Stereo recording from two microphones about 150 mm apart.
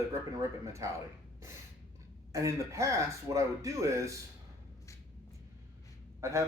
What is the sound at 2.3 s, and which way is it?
Speech, 20° right (ahead or behind).